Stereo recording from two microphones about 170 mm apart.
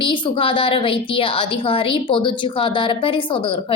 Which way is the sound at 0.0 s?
30° left (ahead or behind).